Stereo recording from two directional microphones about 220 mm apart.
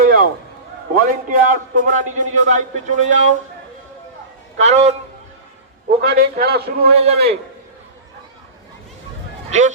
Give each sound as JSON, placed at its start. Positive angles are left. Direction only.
{"t": 0.0, "sound": "a sound", "side_deg": -40}
{"t": 1.0, "sound": "a man's voice", "side_deg": -40}
{"t": 4.5, "sound": "a man's voice", "side_deg": -30}
{"t": 6.0, "sound": "a man's voice", "side_deg": -45}
{"t": 6.9, "sound": "a man's voice", "side_deg": -25}
{"t": 9.5, "sound": "a man's voice", "side_deg": -35}